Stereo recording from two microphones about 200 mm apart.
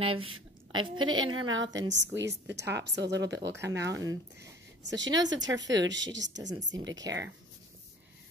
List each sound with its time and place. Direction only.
0.0 s a woman's voice: 25° right (ahead or behind)
0.3 s a sound: 90° right
0.9 s a woman's voice: 90° right; by 6.5 s 65° right (ahead or behind)
6.9 s speech: 20° right (ahead or behind)